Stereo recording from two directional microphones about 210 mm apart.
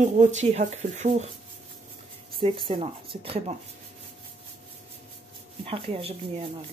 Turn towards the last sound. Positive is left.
turn(degrees=-30)  # may be behind; listen again after turning